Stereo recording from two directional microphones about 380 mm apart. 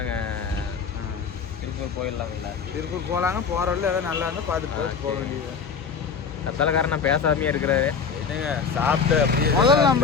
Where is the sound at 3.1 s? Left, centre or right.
Centre.